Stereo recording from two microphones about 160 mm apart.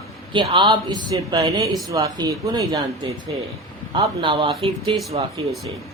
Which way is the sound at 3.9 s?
30° right (ahead or behind).